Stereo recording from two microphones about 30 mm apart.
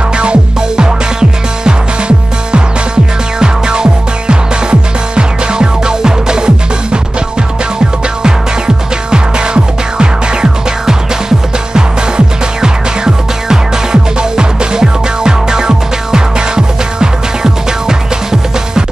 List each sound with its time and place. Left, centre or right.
0.2 s music: right
9.1 s music: right